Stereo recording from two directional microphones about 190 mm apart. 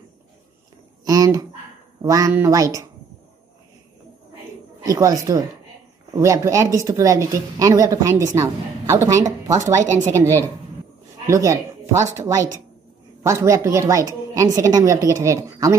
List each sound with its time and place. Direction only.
1.0 s speech: 20° right (ahead or behind)
4.8 s speech: 20° right (ahead or behind)
13.2 s speech: 15° right (ahead or behind)